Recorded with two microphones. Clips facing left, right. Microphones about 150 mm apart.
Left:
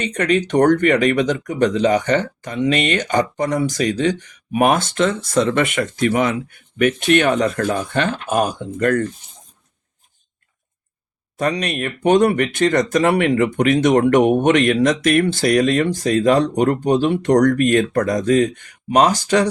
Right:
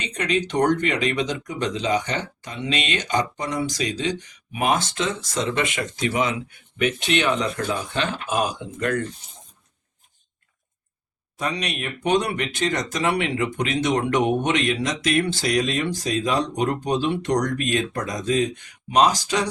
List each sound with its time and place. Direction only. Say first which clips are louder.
0.0 s speech: left 6 dB; 50° left (ahead or behind)
11.3 s speech: left 7 dB; 50° left (ahead or behind)